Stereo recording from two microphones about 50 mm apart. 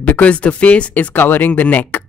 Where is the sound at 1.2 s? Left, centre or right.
Left.